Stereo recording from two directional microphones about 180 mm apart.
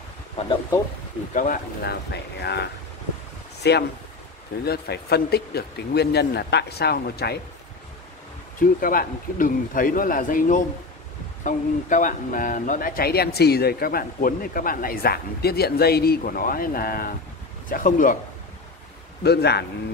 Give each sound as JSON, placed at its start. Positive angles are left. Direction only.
{"t": 1.3, "sound": "speech", "side_deg": 50}
{"t": 2.4, "sound": "speech", "side_deg": 65}
{"t": 8.5, "sound": "speech", "side_deg": 50}
{"t": 19.2, "sound": "speech", "side_deg": 65}